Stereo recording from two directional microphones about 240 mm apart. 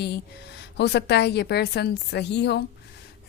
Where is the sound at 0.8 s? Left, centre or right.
Left.